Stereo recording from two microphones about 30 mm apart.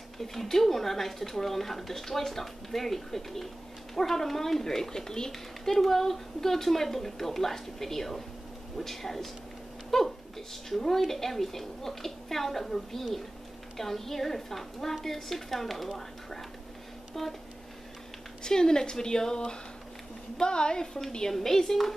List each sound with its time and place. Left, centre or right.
0.2 s speech: centre
5.8 s speech: centre
18.4 s a woman's voice: left
21.3 s speech: centre